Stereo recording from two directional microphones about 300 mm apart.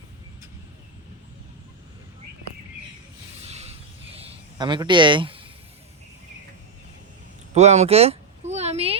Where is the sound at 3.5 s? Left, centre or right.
Right.